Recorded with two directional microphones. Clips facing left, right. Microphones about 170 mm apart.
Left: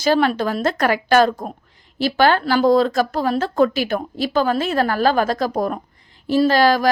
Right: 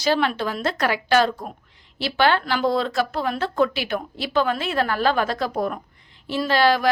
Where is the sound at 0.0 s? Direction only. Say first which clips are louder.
Left 4 dB; 45° left (ahead or behind).